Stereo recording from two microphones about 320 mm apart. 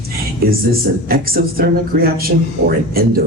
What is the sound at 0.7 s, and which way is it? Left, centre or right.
A woman's voice, right.